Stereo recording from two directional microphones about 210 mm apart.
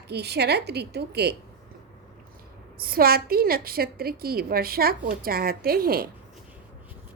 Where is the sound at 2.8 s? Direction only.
45° right (ahead or behind).